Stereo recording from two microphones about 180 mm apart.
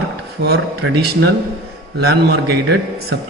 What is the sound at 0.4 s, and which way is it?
A man's voice, 65° right (ahead or behind).